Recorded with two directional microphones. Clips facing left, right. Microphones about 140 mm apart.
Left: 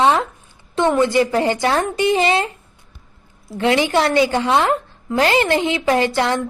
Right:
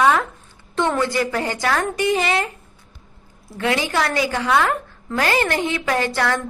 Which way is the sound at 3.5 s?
25° left (ahead or behind).